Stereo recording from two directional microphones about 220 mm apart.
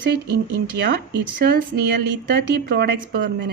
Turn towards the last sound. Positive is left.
turn(degrees=-45)  # may be behind; listen again after turning